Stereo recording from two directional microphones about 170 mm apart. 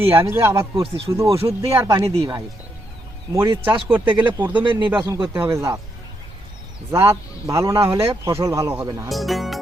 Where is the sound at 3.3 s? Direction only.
20° right (ahead or behind).